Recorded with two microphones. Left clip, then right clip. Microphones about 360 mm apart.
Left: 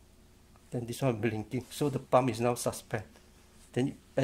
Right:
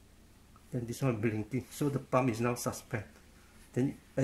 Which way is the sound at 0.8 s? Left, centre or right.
Left.